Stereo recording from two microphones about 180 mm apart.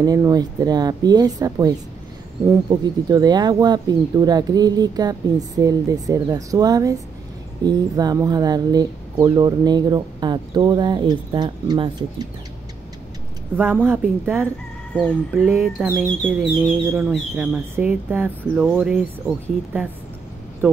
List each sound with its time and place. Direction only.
0.0 s speech: 20° right (ahead or behind)
2.7 s speech: 20° right (ahead or behind)
13.6 s speech: 10° right (ahead or behind)